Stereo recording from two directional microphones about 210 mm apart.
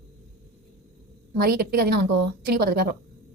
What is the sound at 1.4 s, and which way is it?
A woman's voice, 45° right (ahead or behind).